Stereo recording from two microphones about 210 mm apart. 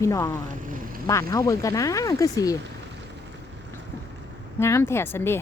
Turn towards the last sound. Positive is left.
turn(degrees=10)  # may be behind; listen again after turning